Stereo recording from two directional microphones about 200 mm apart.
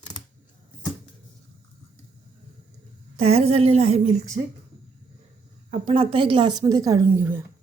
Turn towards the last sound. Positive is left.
turn(degrees=-10)  # may be behind; listen again after turning